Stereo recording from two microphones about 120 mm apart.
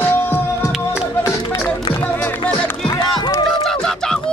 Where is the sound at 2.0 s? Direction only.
25° left (ahead or behind).